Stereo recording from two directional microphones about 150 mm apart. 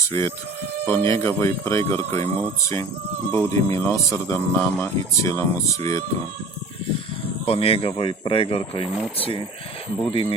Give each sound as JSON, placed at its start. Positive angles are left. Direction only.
{"t": 0.1, "sound": "speech", "side_deg": 15}
{"t": 7.4, "sound": "speech", "side_deg": 40}
{"t": 10.1, "sound": "speech", "side_deg": 40}